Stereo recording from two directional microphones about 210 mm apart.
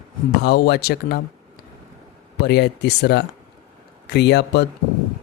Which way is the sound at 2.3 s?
50° left (ahead or behind).